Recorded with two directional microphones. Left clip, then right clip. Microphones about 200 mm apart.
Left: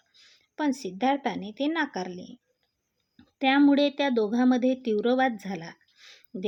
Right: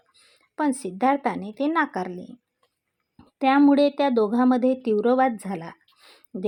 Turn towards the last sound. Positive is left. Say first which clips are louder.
# even
turn(degrees=0)  # may be behind; listen again after turning